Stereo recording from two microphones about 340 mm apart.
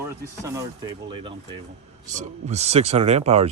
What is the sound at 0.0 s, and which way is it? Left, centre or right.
Speech, centre.